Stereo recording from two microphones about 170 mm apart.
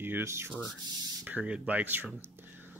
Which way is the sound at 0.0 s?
15° right (ahead or behind).